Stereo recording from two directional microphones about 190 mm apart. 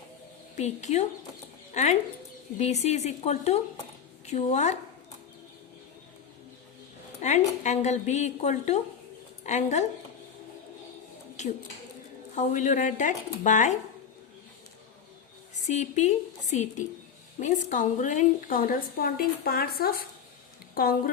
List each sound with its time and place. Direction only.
0.5 s a woman's voice: 40° left (ahead or behind)
7.2 s a woman's voice: 40° left (ahead or behind)
12.4 s a woman's voice: 40° left (ahead or behind)
15.6 s a woman's voice: 40° left (ahead or behind)